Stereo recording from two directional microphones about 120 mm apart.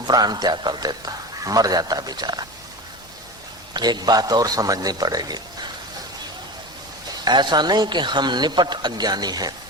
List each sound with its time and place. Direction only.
0.1 s a man's voice: 35° right (ahead or behind)
3.8 s a man's voice: 35° right (ahead or behind)
7.3 s a man's voice: 35° right (ahead or behind)